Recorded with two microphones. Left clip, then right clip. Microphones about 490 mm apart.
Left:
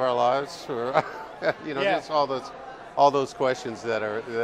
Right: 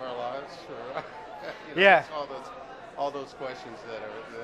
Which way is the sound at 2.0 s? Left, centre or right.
Left.